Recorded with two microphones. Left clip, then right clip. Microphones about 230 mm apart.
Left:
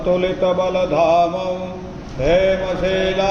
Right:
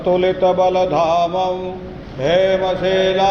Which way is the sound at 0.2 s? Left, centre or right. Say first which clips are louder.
Right 3 dB; right.